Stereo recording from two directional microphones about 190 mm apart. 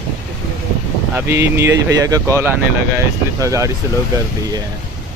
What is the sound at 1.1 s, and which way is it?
Speech, 15° right (ahead or behind).